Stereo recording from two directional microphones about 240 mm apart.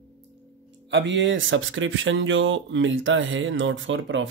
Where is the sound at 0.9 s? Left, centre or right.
Right.